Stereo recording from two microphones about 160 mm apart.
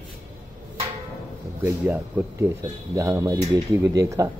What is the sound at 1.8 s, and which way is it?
A man's voice, 10° right (ahead or behind).